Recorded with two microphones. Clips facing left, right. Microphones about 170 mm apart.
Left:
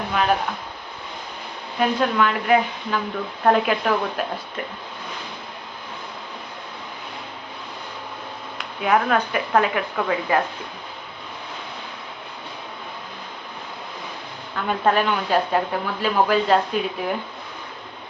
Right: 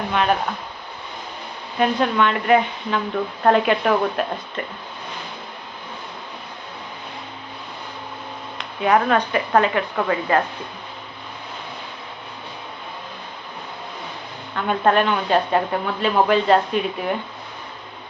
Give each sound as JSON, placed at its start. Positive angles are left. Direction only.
{"t": 1.8, "sound": "a woman's voice", "side_deg": 0}
{"t": 8.5, "sound": "a woman's voice", "side_deg": 0}
{"t": 14.5, "sound": "a woman's voice", "side_deg": 0}